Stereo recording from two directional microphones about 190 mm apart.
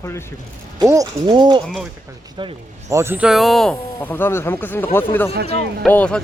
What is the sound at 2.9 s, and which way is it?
Speech, 15° right (ahead or behind).